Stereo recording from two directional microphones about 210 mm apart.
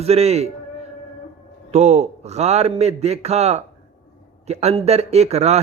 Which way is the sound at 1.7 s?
30° right (ahead or behind).